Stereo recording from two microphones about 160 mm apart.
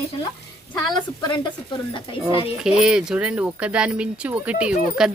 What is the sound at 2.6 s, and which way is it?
Speech, 5° right (ahead or behind).